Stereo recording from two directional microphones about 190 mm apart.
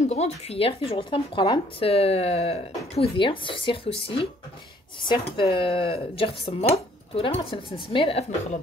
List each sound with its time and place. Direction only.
0.1 s speech: 35° left (ahead or behind)